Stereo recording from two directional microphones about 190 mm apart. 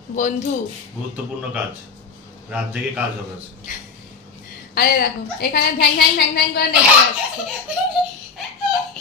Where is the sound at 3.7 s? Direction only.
45° left (ahead or behind).